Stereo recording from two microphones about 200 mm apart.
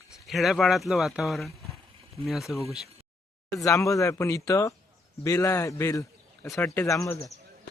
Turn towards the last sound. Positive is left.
turn(degrees=15)  # may be behind; listen again after turning